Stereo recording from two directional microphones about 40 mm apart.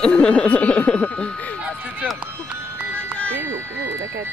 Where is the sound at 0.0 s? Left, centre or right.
Left.